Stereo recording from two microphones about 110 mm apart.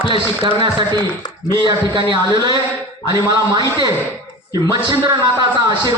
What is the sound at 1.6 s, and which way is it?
A man's voice, 45° right (ahead or behind).